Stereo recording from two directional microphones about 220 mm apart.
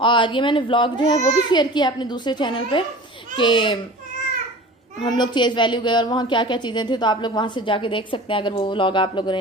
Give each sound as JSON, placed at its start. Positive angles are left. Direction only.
{"t": 0.0, "sound": "a woman's voice", "side_deg": 20}
{"t": 5.0, "sound": "a woman's voice", "side_deg": 20}